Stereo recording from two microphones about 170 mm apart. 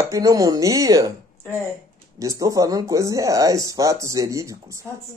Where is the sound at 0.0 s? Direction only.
20° right (ahead or behind).